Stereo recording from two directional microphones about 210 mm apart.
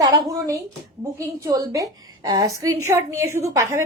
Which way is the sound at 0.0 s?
15° right (ahead or behind).